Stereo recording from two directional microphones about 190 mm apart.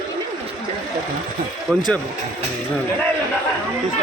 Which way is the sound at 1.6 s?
Centre (ahead or behind).